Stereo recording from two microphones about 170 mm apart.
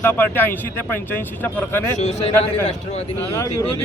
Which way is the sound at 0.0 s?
10° left (ahead or behind).